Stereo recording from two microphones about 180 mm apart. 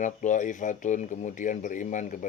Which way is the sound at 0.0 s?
45° left (ahead or behind).